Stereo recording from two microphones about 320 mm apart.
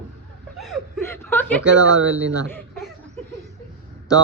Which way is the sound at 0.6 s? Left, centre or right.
Centre.